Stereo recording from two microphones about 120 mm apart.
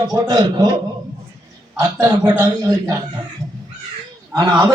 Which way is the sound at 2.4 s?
30° right (ahead or behind).